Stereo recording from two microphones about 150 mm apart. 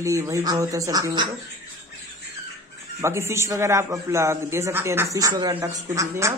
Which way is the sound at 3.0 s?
20° right (ahead or behind).